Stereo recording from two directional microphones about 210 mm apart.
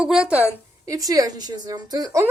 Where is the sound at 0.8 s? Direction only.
15° right (ahead or behind).